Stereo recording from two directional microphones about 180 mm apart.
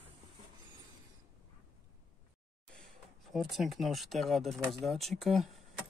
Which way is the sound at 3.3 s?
Centre (ahead or behind).